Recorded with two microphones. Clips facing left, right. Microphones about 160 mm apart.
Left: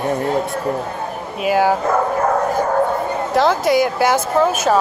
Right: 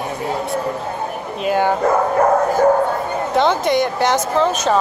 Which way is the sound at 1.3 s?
5° left (ahead or behind).